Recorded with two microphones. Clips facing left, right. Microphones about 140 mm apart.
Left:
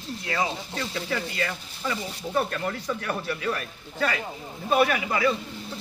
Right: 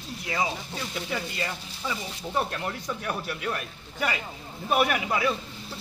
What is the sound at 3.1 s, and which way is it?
Speech, 10° right (ahead or behind).